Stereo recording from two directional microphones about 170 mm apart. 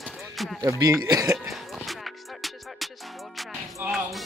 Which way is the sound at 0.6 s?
20° right (ahead or behind).